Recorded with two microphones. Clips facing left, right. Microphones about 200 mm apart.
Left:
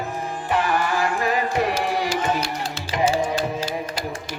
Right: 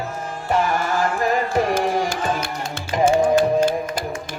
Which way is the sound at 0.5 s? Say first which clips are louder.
Right 2 dB; 45° right (ahead or behind).